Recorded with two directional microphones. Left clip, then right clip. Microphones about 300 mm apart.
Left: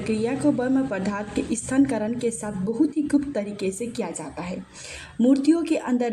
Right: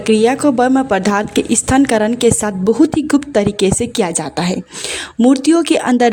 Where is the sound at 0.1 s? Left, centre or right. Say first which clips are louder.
Right 12 dB; right.